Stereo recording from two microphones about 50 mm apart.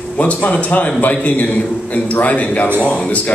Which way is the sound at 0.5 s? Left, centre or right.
Left.